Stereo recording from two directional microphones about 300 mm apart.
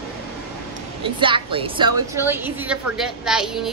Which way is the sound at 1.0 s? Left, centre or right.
Centre.